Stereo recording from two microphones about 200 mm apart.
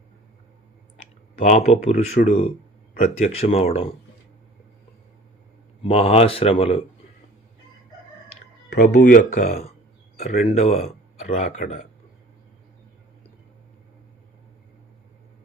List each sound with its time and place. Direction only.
1.4 s speech: 35° left (ahead or behind)
5.8 s speech: 30° left (ahead or behind)
8.9 s speech: 40° left (ahead or behind)